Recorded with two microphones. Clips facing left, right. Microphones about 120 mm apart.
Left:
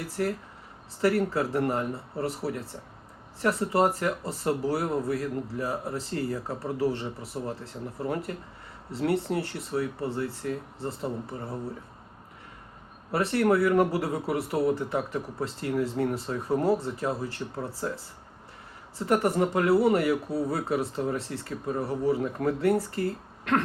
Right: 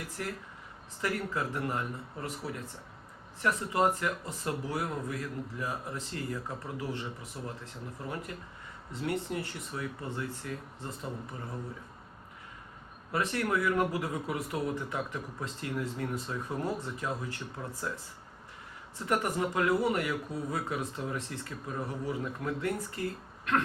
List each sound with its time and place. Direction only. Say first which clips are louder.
0.2 s speech: left 10 dB; 45° left (ahead or behind)
1.0 s speech: left 8 dB; 35° left (ahead or behind)
13.1 s speech: left 7 dB; 35° left (ahead or behind)